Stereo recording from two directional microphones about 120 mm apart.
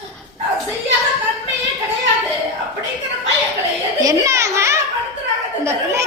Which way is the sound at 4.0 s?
30° right (ahead or behind).